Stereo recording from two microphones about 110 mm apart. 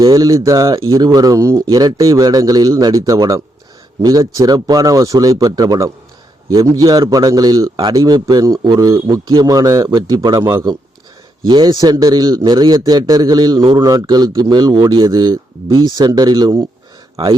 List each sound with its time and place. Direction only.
0.0 s a man's voice: 35° right (ahead or behind)
10.4 s a man's voice: 25° right (ahead or behind)
11.4 s a man's voice: 40° right (ahead or behind)
17.2 s a man's voice: 45° right (ahead or behind)